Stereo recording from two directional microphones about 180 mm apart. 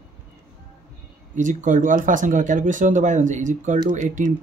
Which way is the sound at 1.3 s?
45° right (ahead or behind).